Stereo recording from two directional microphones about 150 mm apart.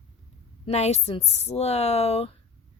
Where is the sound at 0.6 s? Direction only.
45° left (ahead or behind).